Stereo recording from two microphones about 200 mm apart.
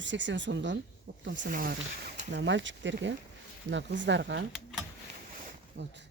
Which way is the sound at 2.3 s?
60° right (ahead or behind).